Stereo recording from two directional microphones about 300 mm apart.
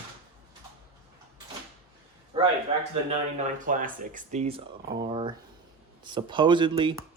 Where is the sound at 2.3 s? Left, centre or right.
Centre.